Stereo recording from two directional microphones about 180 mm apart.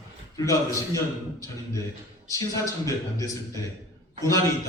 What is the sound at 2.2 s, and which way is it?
A man's voice, 15° left (ahead or behind).